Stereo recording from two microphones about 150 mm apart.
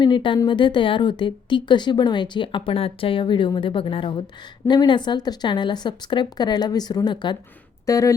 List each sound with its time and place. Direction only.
0.0 s a woman's voice: 30° left (ahead or behind)